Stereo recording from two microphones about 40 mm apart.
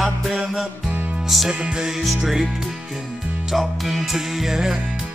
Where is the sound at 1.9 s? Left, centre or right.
Centre.